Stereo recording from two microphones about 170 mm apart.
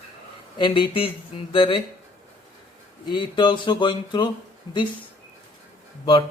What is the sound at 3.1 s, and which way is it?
Speech, 25° left (ahead or behind).